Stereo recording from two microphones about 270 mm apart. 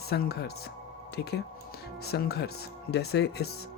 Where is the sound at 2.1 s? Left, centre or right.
Left.